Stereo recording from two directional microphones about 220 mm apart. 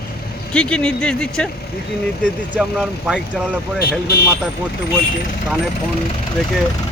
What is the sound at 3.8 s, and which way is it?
Speech, 45° left (ahead or behind).